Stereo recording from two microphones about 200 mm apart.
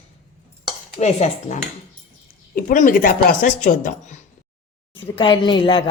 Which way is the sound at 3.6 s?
40° left (ahead or behind).